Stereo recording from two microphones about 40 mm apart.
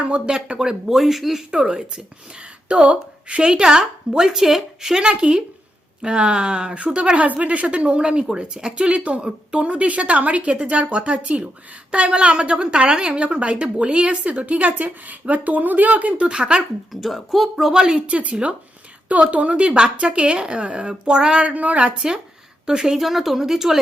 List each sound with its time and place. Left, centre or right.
0.3 s a woman's voice: right
0.9 s a woman's voice: centre
1.5 s a woman's voice: centre
4.3 s a woman's voice: centre; by 16.3 s right
16.3 s a woman's voice: right
16.9 s a woman's voice: centre
17.7 s speech: centre
17.9 s a woman's voice: right; by 21.4 s centre
21.4 s a woman's voice: right
22.6 s a woman's voice: centre
23.0 s a woman's voice: centre